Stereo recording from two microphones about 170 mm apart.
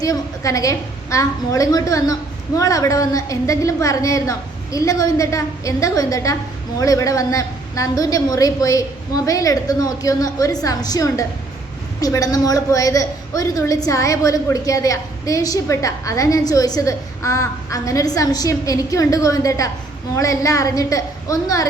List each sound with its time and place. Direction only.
0.0 s a woman's voice: 20° left (ahead or behind)